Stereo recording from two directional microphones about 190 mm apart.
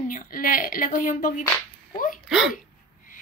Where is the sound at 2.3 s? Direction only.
5° right (ahead or behind).